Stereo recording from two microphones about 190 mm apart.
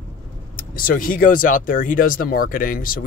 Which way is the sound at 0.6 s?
45° left (ahead or behind).